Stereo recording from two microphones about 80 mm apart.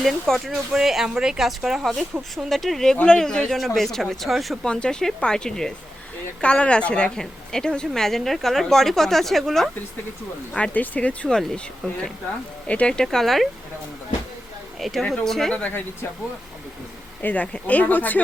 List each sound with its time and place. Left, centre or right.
0.0 s a woman's voice: centre
4.6 s a woman's voice: centre
10.5 s a woman's voice: centre
14.8 s speech: centre
17.2 s speech: centre